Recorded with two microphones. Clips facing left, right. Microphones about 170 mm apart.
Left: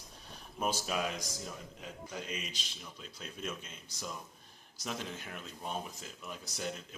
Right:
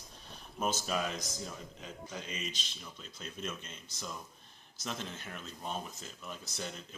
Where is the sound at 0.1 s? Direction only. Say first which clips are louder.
Even; 5° left (ahead or behind).